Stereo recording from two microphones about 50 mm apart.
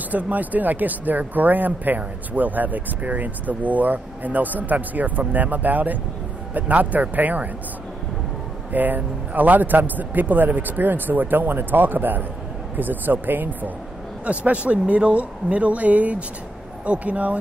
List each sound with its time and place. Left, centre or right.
0.1 s speech: right
8.7 s speech: right